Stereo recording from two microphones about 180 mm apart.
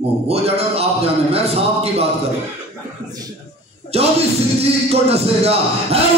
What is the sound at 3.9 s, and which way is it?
A man's voice, 35° right (ahead or behind).